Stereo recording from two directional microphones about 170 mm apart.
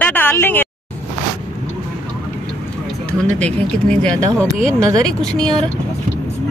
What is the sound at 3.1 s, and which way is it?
A woman's voice, 5° left (ahead or behind).